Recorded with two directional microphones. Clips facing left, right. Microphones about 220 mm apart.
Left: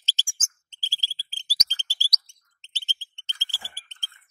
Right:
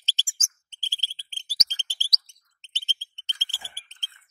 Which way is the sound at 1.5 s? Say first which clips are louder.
Left 1 dB; 35° left (ahead or behind).